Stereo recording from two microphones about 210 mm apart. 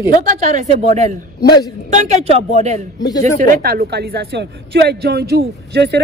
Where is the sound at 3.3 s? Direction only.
45° right (ahead or behind).